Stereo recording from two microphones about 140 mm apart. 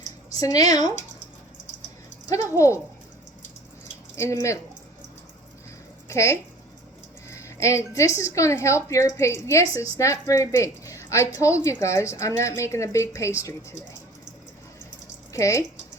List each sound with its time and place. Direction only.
0.3 s a woman's voice: 25° left (ahead or behind)
2.3 s a woman's voice: 20° left (ahead or behind)
4.1 s a woman's voice: 20° left (ahead or behind)
6.1 s a woman's voice: 20° left (ahead or behind)
15.3 s speech: 20° left (ahead or behind)